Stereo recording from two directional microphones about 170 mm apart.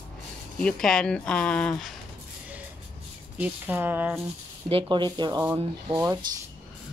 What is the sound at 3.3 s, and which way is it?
Speech, 10° right (ahead or behind).